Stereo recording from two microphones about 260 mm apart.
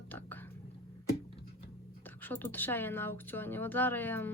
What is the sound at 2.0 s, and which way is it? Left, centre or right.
A woman's voice, centre.